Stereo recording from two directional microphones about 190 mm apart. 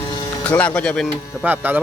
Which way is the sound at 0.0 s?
20° left (ahead or behind).